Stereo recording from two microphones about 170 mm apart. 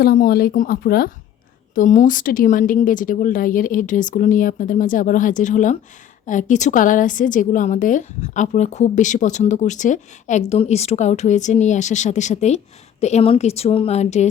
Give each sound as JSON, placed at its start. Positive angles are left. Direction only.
{"t": 0.0, "sound": "speech", "side_deg": 60}
{"t": 1.7, "sound": "a woman's voice", "side_deg": 50}